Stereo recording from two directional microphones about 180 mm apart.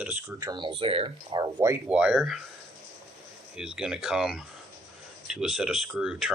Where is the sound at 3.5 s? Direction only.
5° right (ahead or behind).